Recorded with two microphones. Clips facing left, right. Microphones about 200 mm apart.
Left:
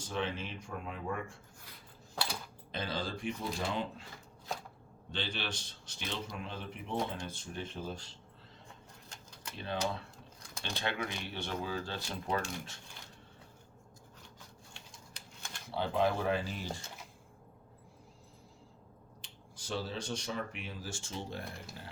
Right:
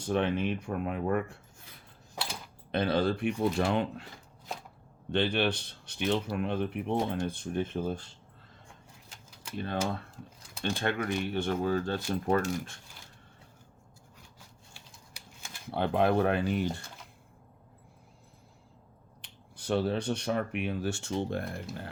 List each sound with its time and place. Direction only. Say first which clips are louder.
0.0 s speech: right 9 dB; 60° right (ahead or behind)
2.7 s speech: right 10 dB; 65° right (ahead or behind)
5.1 s speech: right 12 dB; 60° right (ahead or behind)
9.0 s a sound: right 4 dB; 5° right (ahead or behind)
10.6 s speech: right 6 dB; 50° right (ahead or behind)
14.7 s typing: left 1 dB; 10° right (ahead or behind)
15.6 s speech: right 5 dB; 55° right (ahead or behind)
19.2 s speech: right 7 dB; 60° right (ahead or behind)